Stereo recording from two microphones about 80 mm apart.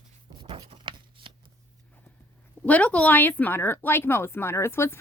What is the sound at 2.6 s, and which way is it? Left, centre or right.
Speech, centre.